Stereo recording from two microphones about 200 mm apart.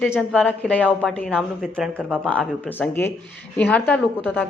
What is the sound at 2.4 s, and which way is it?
Speech, 5° left (ahead or behind).